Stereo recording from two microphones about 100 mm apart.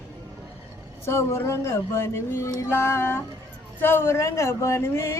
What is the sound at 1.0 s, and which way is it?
Speech, 25° left (ahead or behind).